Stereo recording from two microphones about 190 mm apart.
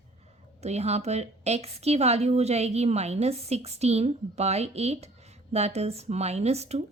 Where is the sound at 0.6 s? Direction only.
35° right (ahead or behind).